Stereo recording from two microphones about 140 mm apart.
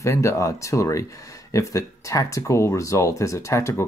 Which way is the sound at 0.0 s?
20° left (ahead or behind).